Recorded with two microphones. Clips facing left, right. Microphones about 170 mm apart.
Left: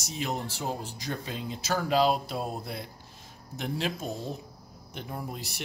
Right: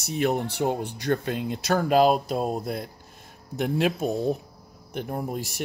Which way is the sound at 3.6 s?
60° right (ahead or behind).